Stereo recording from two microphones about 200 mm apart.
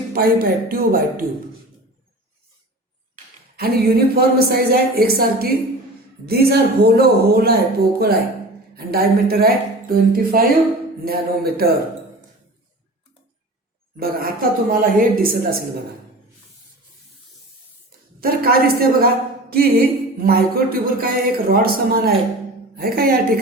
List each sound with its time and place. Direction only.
0.1 s a woman's voice: 45° right (ahead or behind)
3.6 s a woman's voice: 50° right (ahead or behind)
13.9 s a woman's voice: 50° right (ahead or behind)
18.2 s a woman's voice: 50° right (ahead or behind)